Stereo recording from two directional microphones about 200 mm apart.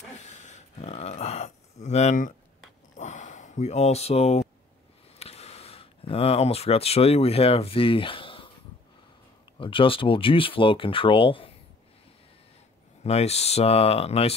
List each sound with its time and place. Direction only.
0.2 s a sound: 35° left (ahead or behind)
5.2 s speech: 30° left (ahead or behind)
9.6 s speech: 25° left (ahead or behind)
13.0 s speech: 30° left (ahead or behind)